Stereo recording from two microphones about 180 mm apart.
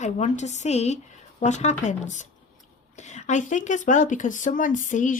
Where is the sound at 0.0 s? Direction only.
40° left (ahead or behind).